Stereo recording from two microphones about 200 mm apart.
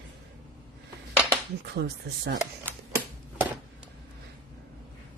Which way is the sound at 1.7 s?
55° right (ahead or behind).